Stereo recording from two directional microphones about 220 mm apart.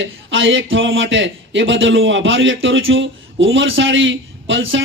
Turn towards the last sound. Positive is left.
turn(degrees=-60)  # may be behind; listen again after turning